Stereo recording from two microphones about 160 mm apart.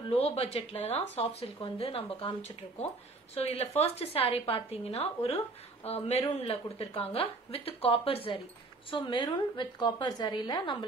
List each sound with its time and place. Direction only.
0.1 s a woman's voice: 40° left (ahead or behind)